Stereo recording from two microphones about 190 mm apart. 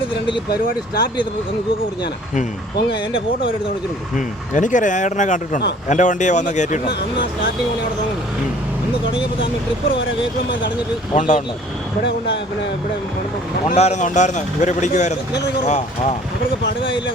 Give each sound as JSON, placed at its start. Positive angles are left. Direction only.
{"t": 4.1, "sound": "speech", "side_deg": 40}
{"t": 11.1, "sound": "speech", "side_deg": 35}
{"t": 13.7, "sound": "speech", "side_deg": 35}